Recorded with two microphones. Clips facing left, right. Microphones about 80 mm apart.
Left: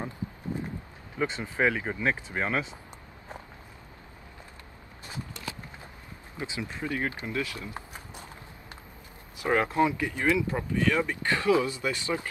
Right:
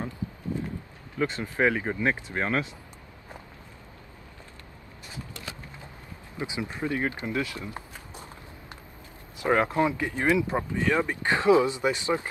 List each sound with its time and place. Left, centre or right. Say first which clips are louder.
1.1 s speech: right 2 dB; centre
1.6 s speech: right 2 dB; centre
6.3 s speech: right 3 dB; right
8.1 s walk: right 1 dB; right
9.4 s speech: right 1 dB; right